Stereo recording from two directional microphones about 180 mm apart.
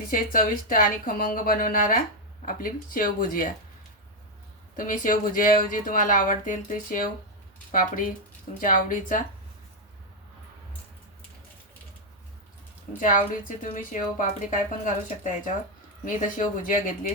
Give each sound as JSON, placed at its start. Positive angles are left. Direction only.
{"t": 0.1, "sound": "speech", "side_deg": 50}
{"t": 4.8, "sound": "speech", "side_deg": 50}
{"t": 13.0, "sound": "speech", "side_deg": 45}